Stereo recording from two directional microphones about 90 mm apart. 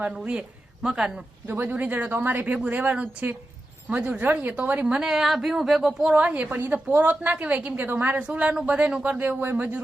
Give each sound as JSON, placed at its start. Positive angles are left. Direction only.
{"t": 0.1, "sound": "speech", "side_deg": -10}
{"t": 1.5, "sound": "a woman's voice", "side_deg": -20}
{"t": 5.0, "sound": "a woman's voice", "side_deg": -5}